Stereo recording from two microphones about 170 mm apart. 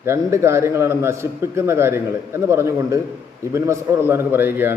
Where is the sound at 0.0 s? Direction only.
15° right (ahead or behind).